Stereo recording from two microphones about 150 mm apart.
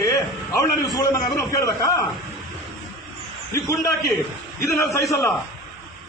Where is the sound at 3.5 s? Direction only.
20° left (ahead or behind).